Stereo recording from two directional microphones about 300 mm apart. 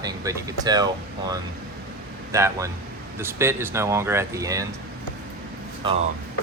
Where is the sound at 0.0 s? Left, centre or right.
Centre.